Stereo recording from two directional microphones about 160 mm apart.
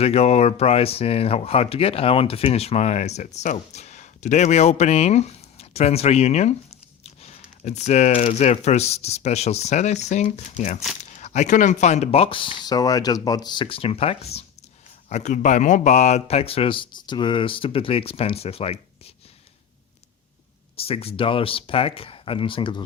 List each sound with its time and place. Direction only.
0.0 s speech: 40° left (ahead or behind)
20.7 s speech: 35° left (ahead or behind)